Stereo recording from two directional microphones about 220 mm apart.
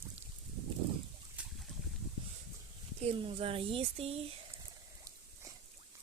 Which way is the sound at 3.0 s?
25° right (ahead or behind).